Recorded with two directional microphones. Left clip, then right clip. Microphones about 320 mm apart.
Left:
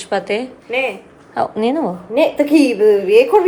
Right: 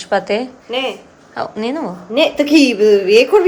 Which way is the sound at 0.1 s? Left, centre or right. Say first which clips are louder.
Right 3 dB; centre.